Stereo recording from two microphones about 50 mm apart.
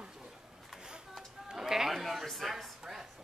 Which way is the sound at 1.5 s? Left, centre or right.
Centre.